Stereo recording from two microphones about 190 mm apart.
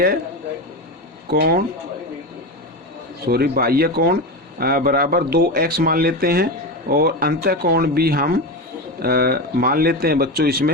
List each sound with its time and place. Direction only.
1.3 s speech: 55° right (ahead or behind)
3.2 s speech: 55° right (ahead or behind)